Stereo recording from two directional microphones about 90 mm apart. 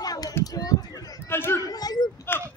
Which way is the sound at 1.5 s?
45° left (ahead or behind).